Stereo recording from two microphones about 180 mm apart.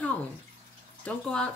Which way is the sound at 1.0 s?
5° left (ahead or behind).